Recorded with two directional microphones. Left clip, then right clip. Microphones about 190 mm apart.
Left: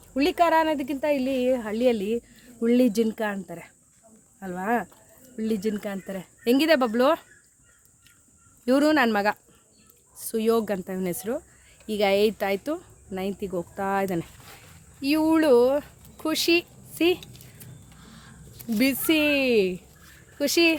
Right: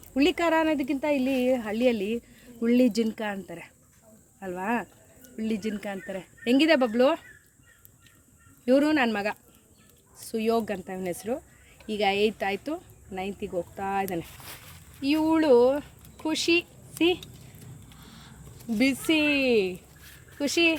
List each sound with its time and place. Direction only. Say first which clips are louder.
0.1 s speech: left 3 dB; 10° left (ahead or behind)
8.6 s speech: left 2 dB; 30° left (ahead or behind)
18.0 s a sound: left 1 dB; centre (ahead or behind)
18.7 s speech: left 2 dB; 25° left (ahead or behind)